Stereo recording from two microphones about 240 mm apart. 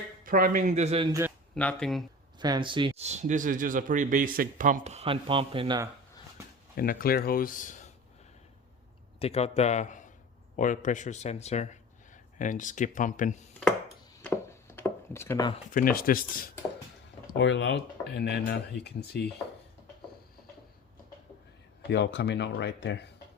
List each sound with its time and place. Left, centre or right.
0.3 s a man's voice: right
1.5 s speech: centre
2.4 s speech: centre
6.7 s speech: left
9.1 s a man's voice: left
13.6 s chopping: centre
15.7 s speech: left
17.3 s speech: left
21.8 s speech: left